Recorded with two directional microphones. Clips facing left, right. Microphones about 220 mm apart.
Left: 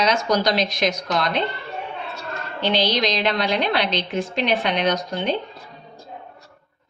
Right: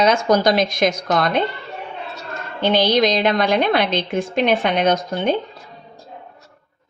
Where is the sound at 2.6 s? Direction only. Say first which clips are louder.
Right 5 dB; 50° right (ahead or behind).